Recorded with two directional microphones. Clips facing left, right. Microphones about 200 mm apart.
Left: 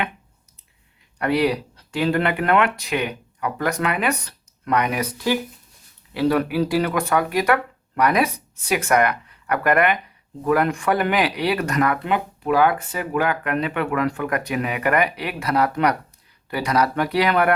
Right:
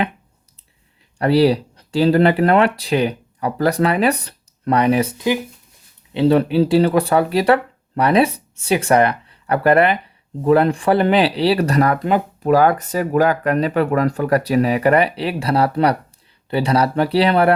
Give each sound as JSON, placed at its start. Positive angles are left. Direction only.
{"t": 1.2, "sound": "speech", "side_deg": -30}